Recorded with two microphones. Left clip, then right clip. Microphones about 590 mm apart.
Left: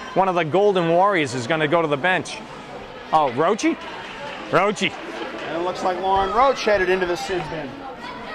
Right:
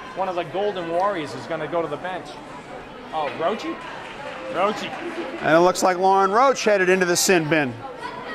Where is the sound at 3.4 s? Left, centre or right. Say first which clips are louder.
Left 5 dB; left.